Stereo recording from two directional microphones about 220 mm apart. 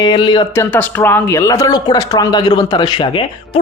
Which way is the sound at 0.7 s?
10° left (ahead or behind).